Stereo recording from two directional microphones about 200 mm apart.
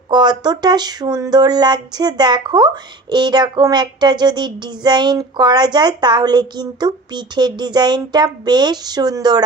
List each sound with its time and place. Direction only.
0.1 s speech: 20° right (ahead or behind)